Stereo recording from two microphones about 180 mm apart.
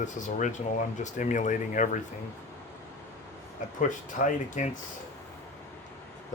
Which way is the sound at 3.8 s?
45° left (ahead or behind).